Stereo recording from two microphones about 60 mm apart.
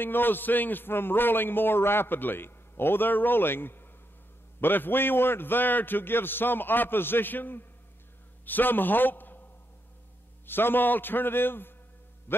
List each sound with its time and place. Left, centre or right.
0.0 s a man's voice: left
10.4 s a man's voice: left
12.3 s music: left